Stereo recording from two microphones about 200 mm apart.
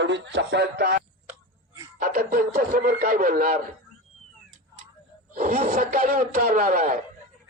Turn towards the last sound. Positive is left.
turn(degrees=-40)  # may be behind; listen again after turning